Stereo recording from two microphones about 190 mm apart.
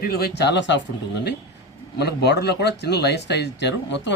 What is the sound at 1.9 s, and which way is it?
Speech, 60° left (ahead or behind).